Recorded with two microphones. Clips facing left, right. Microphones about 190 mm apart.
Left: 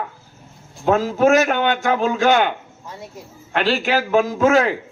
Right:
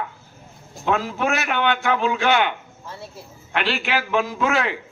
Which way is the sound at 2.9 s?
15° left (ahead or behind).